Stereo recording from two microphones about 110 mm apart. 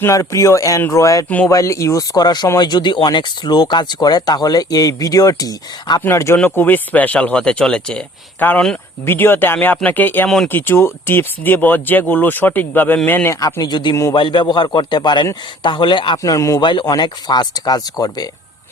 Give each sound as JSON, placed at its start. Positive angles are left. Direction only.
{"t": 0.0, "sound": "speech", "side_deg": 30}
{"t": 6.0, "sound": "speech", "side_deg": 25}
{"t": 10.2, "sound": "speech", "side_deg": 0}
{"t": 10.5, "sound": "speech", "side_deg": 20}
{"t": 13.4, "sound": "a man's voice", "side_deg": 40}
{"t": 16.1, "sound": "speech", "side_deg": 30}
{"t": 16.6, "sound": "a man's voice", "side_deg": 45}